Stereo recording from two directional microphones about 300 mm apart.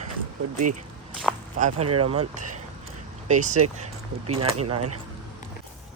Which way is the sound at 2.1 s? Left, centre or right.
Right.